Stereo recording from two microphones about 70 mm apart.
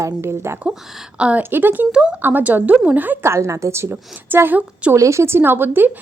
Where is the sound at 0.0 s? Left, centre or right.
Right.